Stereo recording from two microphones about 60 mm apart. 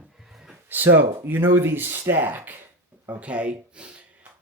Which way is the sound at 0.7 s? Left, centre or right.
Right.